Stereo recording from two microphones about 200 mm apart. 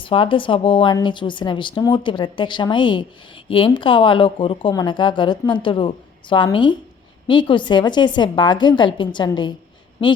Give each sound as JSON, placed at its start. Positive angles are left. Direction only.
{"t": 0.0, "sound": "speech", "side_deg": 25}